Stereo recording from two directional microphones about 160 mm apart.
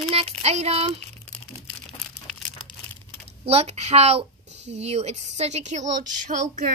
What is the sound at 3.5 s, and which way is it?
Child singing, 40° right (ahead or behind).